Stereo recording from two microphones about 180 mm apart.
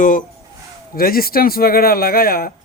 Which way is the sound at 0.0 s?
45° left (ahead or behind).